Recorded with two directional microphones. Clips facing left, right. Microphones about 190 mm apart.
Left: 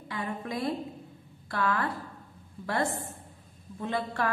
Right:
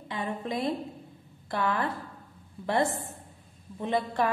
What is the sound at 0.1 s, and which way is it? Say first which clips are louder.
A woman's voice: right 2 dB; 20° right (ahead or behind).